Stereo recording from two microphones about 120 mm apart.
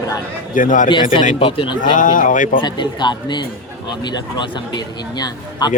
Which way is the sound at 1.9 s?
90° left.